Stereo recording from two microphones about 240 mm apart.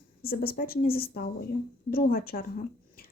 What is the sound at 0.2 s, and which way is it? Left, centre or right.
A woman's voice, left.